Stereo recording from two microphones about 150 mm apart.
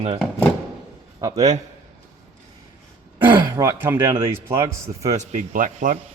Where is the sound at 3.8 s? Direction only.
15° right (ahead or behind).